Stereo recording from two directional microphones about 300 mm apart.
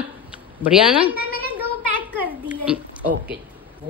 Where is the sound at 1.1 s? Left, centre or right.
Left.